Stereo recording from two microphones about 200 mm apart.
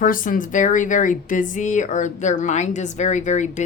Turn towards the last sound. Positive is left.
turn(degrees=35)  # may be behind; listen again after turning